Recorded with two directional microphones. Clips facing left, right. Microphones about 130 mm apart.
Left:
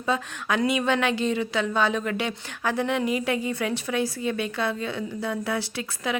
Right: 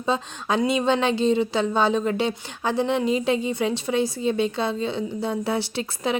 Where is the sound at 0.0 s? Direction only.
25° right (ahead or behind).